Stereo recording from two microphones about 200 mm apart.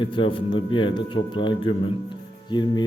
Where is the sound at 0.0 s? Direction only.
25° left (ahead or behind).